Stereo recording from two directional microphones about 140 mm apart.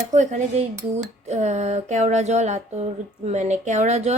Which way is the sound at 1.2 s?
55° right (ahead or behind).